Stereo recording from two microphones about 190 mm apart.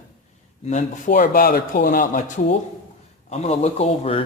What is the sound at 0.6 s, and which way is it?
Speech, 40° left (ahead or behind).